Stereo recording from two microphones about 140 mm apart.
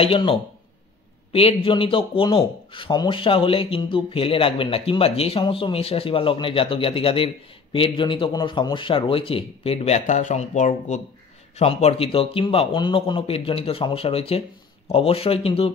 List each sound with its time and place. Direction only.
0.0 s speech: 40° left (ahead or behind); by 11.0 s 60° left (ahead or behind)
11.5 s speech: 50° left (ahead or behind)